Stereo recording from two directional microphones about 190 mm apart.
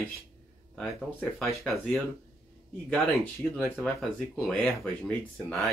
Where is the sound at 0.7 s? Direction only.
Centre (ahead or behind).